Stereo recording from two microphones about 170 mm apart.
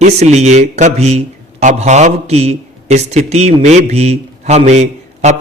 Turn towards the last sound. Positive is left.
turn(degrees=-40)  # may be behind; listen again after turning